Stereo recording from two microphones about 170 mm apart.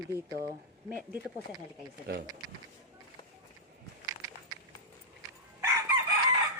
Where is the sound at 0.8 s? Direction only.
10° right (ahead or behind).